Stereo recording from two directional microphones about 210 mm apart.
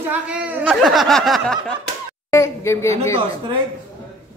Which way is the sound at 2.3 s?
15° left (ahead or behind).